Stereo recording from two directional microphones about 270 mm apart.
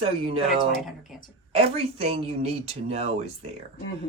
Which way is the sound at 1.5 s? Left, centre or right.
Right.